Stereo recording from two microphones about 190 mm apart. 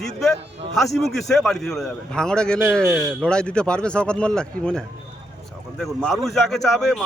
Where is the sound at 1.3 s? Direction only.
Centre (ahead or behind).